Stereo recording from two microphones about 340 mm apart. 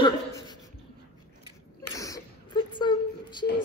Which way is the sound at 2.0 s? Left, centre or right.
Centre.